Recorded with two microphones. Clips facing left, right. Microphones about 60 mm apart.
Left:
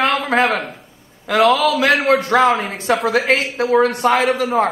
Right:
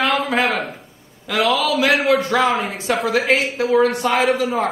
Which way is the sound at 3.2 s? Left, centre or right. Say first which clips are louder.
Left 1 dB; left.